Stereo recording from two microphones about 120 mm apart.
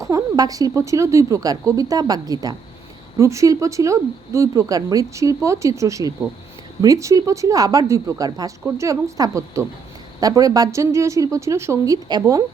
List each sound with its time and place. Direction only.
0.0 s speech: 30° right (ahead or behind)